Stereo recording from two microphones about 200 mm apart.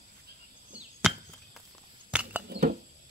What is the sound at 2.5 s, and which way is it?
Patter, 50° right (ahead or behind).